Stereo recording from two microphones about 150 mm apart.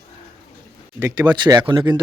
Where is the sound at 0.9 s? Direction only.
20° right (ahead or behind).